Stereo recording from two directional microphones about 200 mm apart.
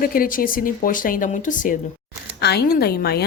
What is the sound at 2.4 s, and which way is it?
Speech, 55° left (ahead or behind).